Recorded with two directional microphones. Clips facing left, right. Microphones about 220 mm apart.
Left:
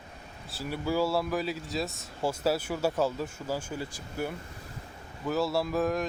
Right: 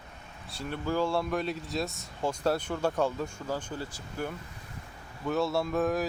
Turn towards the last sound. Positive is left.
turn(degrees=0)  # may be behind; listen again after turning